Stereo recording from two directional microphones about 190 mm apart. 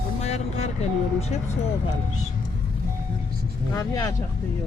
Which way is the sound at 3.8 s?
20° left (ahead or behind).